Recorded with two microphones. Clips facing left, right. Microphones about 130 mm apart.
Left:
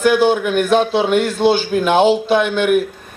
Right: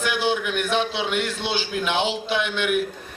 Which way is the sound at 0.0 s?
45° left (ahead or behind).